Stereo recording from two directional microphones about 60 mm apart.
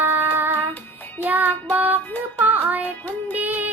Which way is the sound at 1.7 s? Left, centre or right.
Right.